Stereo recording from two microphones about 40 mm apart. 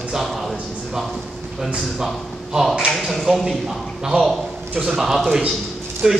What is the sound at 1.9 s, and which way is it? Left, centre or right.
A man's voice, centre.